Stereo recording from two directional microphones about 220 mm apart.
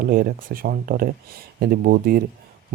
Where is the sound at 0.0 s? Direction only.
40° right (ahead or behind).